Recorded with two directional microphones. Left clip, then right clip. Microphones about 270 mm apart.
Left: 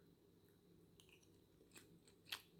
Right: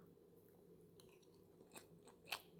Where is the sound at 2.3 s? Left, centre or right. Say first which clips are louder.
Right 2 dB; centre.